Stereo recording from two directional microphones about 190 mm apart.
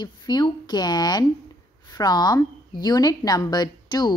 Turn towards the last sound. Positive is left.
turn(degrees=20)  # may be behind; listen again after turning